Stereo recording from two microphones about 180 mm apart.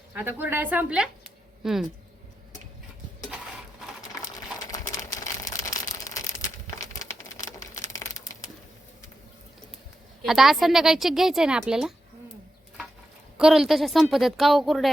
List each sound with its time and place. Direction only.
0.1 s a woman's voice: 10° right (ahead or behind)
4.7 s a sound: 20° left (ahead or behind)
10.2 s a woman's voice: centre (ahead or behind)
13.3 s a woman's voice: 5° right (ahead or behind)